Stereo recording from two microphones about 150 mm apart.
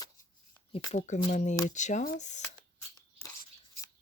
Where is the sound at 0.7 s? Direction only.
50° left (ahead or behind).